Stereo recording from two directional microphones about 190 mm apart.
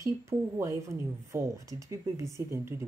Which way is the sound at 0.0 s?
15° right (ahead or behind).